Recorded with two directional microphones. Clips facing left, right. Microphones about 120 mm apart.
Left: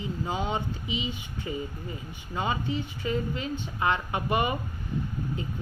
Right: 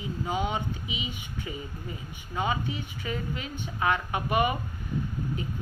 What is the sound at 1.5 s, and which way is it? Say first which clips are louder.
Speech: left 5 dB; 35° left (ahead or behind).